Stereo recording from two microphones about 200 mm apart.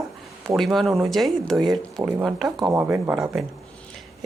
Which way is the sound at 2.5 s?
20° right (ahead or behind).